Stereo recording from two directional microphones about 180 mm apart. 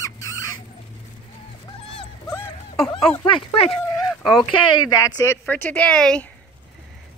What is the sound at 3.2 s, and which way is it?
Speech, 30° left (ahead or behind).